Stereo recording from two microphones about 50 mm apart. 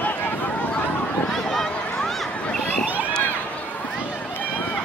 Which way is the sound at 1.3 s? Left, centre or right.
Centre.